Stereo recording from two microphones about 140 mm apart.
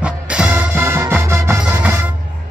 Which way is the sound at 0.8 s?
20° right (ahead or behind).